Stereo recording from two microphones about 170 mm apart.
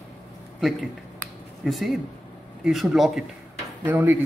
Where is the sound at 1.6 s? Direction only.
Centre (ahead or behind).